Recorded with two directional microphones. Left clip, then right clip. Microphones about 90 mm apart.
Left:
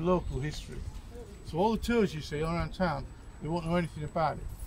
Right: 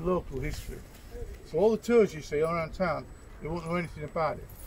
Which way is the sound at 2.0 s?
25° left (ahead or behind).